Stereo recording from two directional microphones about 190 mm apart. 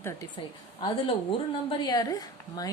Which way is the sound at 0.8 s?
25° left (ahead or behind).